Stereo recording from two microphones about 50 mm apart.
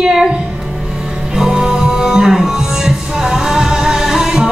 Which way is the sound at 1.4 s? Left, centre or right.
Centre.